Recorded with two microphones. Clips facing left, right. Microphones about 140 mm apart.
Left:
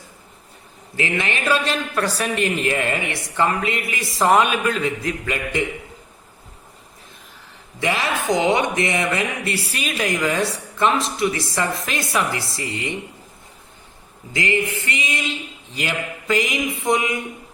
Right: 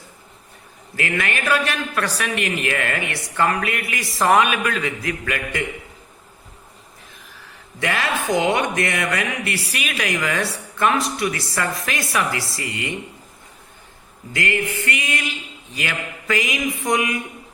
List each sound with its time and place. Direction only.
0.9 s speech: 25° left (ahead or behind)
7.9 s speech: 20° left (ahead or behind)
14.3 s speech: 20° left (ahead or behind)